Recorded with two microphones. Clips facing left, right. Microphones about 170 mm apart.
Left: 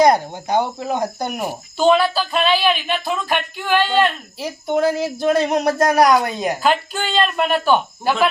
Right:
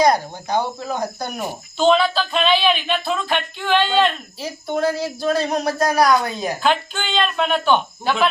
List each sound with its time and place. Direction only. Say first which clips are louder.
0.0 s speech: left 3 dB; 20° left (ahead or behind)
1.4 s speech: even; 10° left (ahead or behind)
6.6 s speech: even; 5° left (ahead or behind)